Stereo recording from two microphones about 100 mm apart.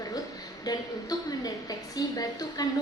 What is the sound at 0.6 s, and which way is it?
A woman's voice, 40° left (ahead or behind).